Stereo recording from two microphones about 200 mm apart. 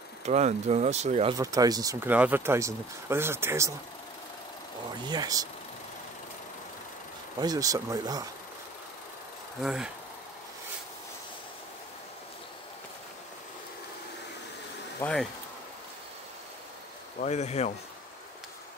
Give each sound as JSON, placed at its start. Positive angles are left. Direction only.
{"t": 0.2, "sound": "speech", "side_deg": -35}
{"t": 1.4, "sound": "speech", "side_deg": -15}
{"t": 5.0, "sound": "speech", "side_deg": -20}
{"t": 7.3, "sound": "speech", "side_deg": -20}
{"t": 9.6, "sound": "speech", "side_deg": -5}
{"t": 15.0, "sound": "speech", "side_deg": 5}
{"t": 17.2, "sound": "speech", "side_deg": 35}